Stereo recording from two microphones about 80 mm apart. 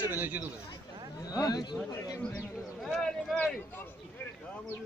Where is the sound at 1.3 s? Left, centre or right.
Left.